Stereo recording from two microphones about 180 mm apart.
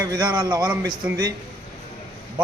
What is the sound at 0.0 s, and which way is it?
Speech, 20° right (ahead or behind).